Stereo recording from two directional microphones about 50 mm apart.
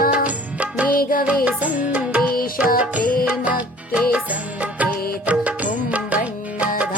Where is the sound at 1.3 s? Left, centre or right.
Right.